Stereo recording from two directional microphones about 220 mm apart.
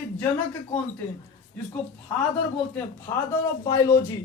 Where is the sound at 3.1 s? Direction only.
20° left (ahead or behind).